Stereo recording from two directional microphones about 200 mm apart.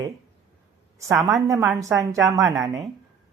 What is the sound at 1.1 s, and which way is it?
Speech, centre (ahead or behind).